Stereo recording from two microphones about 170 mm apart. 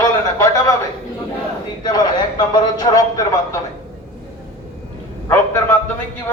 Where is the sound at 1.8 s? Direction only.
25° left (ahead or behind).